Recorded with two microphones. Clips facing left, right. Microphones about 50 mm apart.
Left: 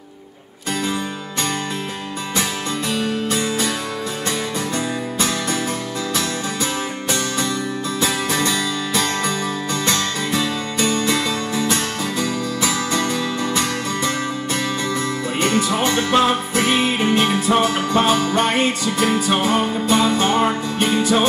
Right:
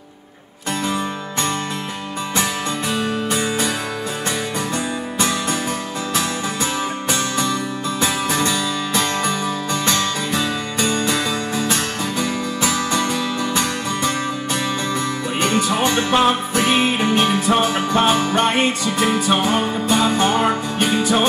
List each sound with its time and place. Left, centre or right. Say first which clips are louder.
3.0 s music: even; right
6.1 s music: right 3 dB; right